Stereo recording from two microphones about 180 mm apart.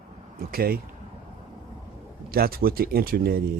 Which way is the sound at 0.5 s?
55° right (ahead or behind).